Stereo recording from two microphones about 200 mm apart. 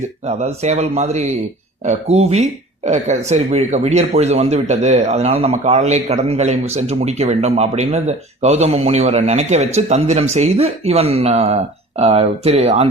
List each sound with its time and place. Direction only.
0.3 s speech: 35° right (ahead or behind)